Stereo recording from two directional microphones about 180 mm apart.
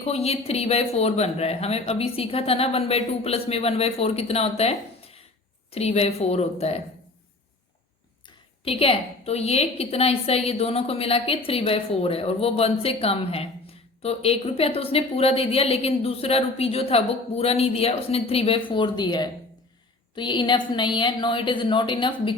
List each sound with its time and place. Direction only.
0.0 s speech: 35° left (ahead or behind)
8.6 s a woman's voice: 30° left (ahead or behind)